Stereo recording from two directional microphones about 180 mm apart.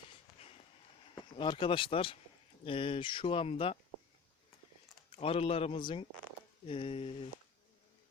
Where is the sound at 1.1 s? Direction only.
25° left (ahead or behind).